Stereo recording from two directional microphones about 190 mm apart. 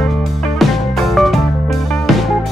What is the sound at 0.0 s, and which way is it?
Music, centre (ahead or behind).